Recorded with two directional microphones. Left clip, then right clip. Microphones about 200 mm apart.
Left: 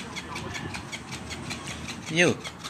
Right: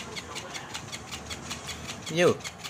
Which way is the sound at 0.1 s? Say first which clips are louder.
Left 2 dB; 10° left (ahead or behind).